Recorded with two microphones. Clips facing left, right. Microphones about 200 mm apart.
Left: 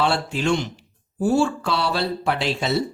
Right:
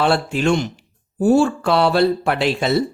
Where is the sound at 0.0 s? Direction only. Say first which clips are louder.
Right 4 dB; 55° right (ahead or behind).